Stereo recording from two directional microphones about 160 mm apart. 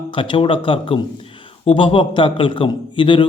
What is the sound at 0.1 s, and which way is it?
A man's voice, 30° left (ahead or behind).